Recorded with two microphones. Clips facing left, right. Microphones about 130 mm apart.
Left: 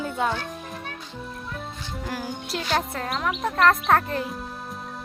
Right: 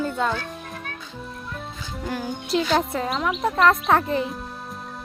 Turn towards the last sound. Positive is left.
turn(degrees=0)  # may be behind; listen again after turning